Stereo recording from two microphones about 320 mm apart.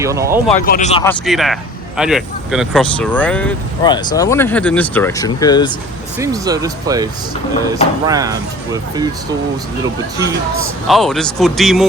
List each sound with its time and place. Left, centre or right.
0.0 s speech: centre
0.6 s speech: left
1.0 s speech: centre
6.1 s speech: centre
10.8 s speech: centre